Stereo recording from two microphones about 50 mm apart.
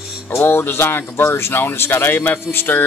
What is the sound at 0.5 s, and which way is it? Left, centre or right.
Speech, left.